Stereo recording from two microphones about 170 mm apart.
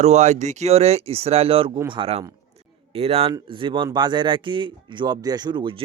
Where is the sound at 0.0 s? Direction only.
40° right (ahead or behind).